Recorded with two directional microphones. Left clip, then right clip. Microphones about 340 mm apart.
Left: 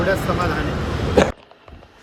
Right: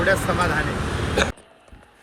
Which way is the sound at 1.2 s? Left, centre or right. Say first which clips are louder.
Left 6 dB; left.